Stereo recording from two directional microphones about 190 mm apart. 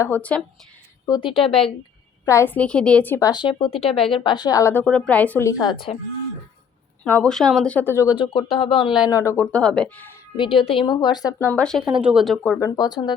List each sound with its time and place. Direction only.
0.0 s a woman's voice: 10° left (ahead or behind)
1.0 s speech: 25° left (ahead or behind)
2.2 s a woman's voice: 15° left (ahead or behind)
7.0 s a woman's voice: 5° left (ahead or behind)
8.2 s speech: 25° left (ahead or behind)
9.0 s a woman's voice: 15° left (ahead or behind)
10.3 s speech: 25° left (ahead or behind); by 12.5 s 5° left (ahead or behind)
12.5 s speech: 20° left (ahead or behind)